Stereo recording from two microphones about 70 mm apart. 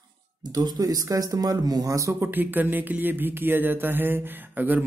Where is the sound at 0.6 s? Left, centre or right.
Right.